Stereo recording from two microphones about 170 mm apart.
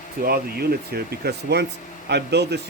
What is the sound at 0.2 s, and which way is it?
Speech, 65° right (ahead or behind).